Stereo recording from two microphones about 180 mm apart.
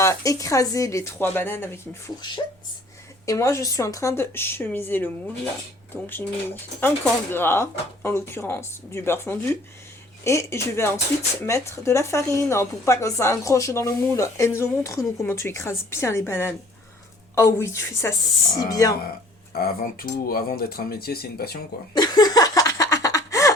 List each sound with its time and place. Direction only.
0.0 s speech: 15° left (ahead or behind)
3.2 s speech: 15° left (ahead or behind)
19.5 s speech: 55° left (ahead or behind)
21.9 s a sound: 20° left (ahead or behind)